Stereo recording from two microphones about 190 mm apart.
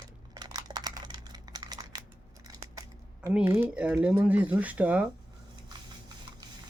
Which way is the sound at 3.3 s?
10° right (ahead or behind).